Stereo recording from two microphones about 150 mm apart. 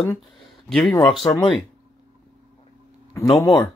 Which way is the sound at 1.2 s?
30° left (ahead or behind).